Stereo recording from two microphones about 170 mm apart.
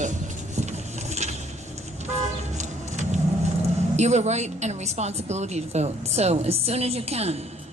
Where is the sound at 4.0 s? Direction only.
40° right (ahead or behind).